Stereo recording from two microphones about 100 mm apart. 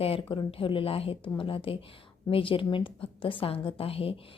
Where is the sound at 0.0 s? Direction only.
70° left (ahead or behind).